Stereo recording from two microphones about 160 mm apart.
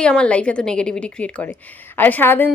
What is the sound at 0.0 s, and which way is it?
A woman's voice, 5° left (ahead or behind).